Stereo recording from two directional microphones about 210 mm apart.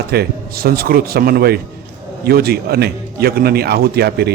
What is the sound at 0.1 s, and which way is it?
A man's voice, 45° right (ahead or behind).